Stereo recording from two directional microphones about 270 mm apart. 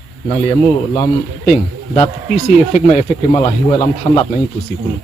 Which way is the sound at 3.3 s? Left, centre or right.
Centre.